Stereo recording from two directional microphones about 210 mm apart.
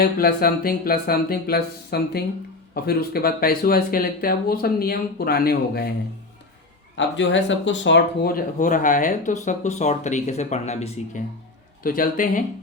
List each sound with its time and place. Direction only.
0.0 s speech: 45° left (ahead or behind)
6.9 s speech: 60° left (ahead or behind); by 11.2 s 30° left (ahead or behind)
11.8 s speech: 40° left (ahead or behind)